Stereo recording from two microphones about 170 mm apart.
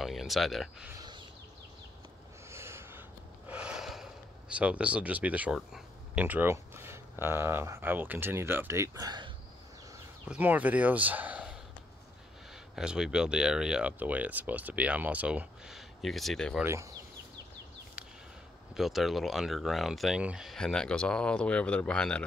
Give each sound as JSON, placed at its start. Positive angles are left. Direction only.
{"t": 0.0, "sound": "speech", "side_deg": 0}
{"t": 2.5, "sound": "gasp", "side_deg": -15}
{"t": 10.2, "sound": "speech", "side_deg": -10}
{"t": 12.7, "sound": "speech", "side_deg": -5}
{"t": 16.6, "sound": "speech", "side_deg": -15}
{"t": 18.8, "sound": "speech", "side_deg": 0}